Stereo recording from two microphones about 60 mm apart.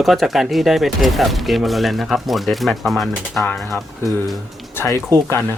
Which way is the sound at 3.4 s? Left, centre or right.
Left.